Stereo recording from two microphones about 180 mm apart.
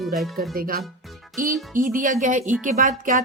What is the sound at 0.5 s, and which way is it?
Speech, 55° right (ahead or behind).